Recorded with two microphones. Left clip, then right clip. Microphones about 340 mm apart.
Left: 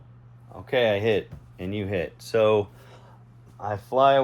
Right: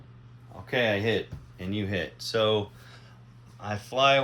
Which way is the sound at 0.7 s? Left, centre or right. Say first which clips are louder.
Left 4 dB; left.